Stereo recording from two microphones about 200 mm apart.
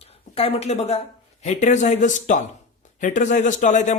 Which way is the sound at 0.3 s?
30° left (ahead or behind).